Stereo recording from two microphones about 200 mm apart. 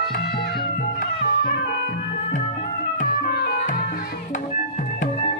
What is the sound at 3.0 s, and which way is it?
Music, 45° left (ahead or behind).